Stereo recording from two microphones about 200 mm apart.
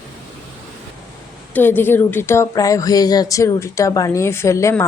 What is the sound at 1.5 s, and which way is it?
Speech, 10° left (ahead or behind).